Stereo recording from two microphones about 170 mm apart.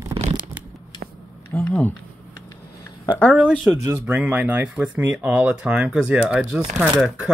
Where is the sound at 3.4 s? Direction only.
5° right (ahead or behind).